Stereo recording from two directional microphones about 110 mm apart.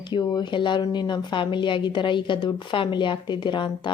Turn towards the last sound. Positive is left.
turn(degrees=45)  # may be behind; listen again after turning